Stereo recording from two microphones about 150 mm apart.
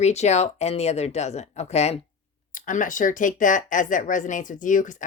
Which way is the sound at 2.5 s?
60° left (ahead or behind).